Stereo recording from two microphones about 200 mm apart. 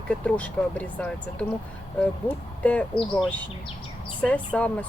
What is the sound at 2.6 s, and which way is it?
Speech, 5° left (ahead or behind).